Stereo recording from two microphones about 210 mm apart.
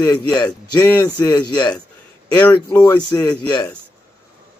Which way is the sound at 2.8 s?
15° left (ahead or behind).